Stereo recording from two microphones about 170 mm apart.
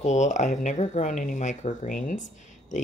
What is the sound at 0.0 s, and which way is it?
Speech, 45° left (ahead or behind).